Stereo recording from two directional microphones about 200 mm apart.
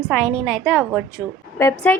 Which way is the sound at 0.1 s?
Centre (ahead or behind).